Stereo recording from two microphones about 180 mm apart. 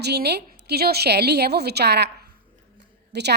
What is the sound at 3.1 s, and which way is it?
Speech, 70° right (ahead or behind).